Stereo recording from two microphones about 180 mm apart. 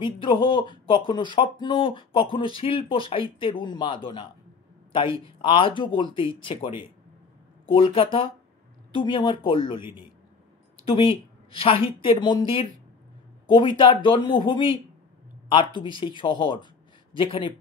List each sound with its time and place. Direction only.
0.0 s speech: 30° left (ahead or behind)
10.9 s speech: 30° left (ahead or behind)